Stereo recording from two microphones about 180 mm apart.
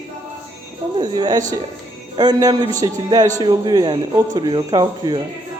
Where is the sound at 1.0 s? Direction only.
25° right (ahead or behind).